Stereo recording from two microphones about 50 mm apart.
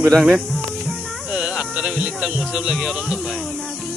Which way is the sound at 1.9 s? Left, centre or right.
Right.